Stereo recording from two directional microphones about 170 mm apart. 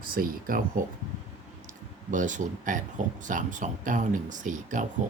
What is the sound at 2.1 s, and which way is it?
Speech, 50° right (ahead or behind).